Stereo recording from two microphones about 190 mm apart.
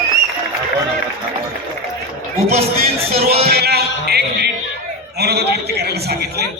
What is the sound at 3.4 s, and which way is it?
Music, 55° right (ahead or behind).